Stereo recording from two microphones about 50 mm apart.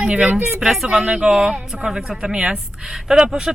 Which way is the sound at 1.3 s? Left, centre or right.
Right.